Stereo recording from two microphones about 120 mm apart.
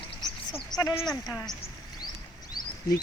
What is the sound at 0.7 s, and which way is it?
Speech, 35° left (ahead or behind).